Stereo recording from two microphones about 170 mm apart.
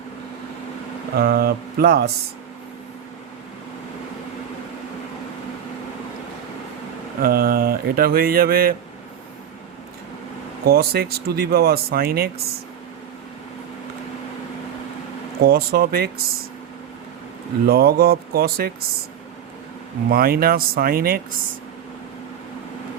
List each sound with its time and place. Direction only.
1.1 s speech: 60° right (ahead or behind)
7.2 s speech: 60° right (ahead or behind)
10.7 s speech: 65° right (ahead or behind)
15.4 s speech: 65° right (ahead or behind)
17.7 s speech: 65° right (ahead or behind)
20.1 s speech: 60° right (ahead or behind)